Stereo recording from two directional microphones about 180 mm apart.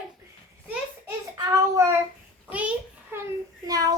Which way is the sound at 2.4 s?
5° right (ahead or behind).